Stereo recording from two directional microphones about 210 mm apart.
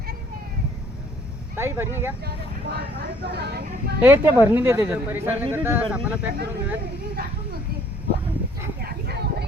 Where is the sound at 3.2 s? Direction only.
50° right (ahead or behind).